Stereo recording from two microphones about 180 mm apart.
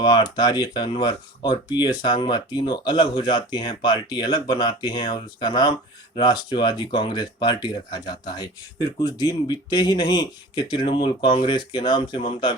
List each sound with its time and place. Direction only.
0.0 s speech: 25° left (ahead or behind)